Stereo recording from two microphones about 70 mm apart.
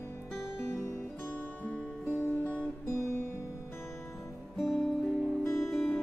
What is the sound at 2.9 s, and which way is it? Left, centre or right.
Music, left.